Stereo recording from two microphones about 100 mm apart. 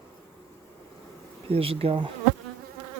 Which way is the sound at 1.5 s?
70° right (ahead or behind).